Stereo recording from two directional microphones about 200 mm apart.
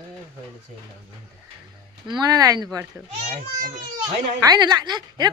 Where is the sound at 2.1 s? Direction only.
20° right (ahead or behind).